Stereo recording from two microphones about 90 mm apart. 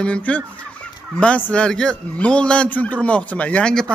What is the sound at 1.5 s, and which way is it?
A man's voice, 10° left (ahead or behind).